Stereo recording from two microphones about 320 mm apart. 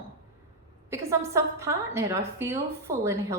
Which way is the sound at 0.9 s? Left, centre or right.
Centre.